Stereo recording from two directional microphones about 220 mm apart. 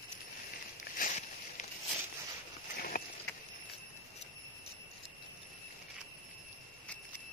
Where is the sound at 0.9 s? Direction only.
35° left (ahead or behind).